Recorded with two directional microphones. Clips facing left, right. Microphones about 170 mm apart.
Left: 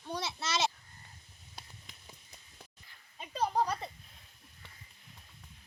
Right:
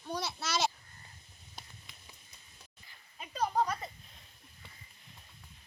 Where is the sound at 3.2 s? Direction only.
30° left (ahead or behind).